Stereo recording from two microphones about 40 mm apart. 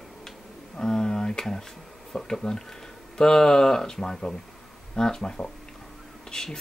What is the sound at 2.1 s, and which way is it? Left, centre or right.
Speech, centre.